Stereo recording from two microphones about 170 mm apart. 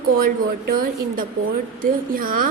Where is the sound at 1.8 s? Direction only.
55° right (ahead or behind).